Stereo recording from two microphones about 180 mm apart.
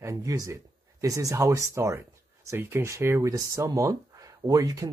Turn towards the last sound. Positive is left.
turn(degrees=-20)  # may be behind; listen again after turning